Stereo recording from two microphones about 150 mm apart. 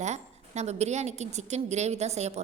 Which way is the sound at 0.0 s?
50° right (ahead or behind).